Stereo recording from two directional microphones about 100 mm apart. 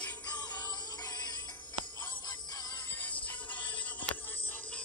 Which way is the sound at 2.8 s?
15° left (ahead or behind).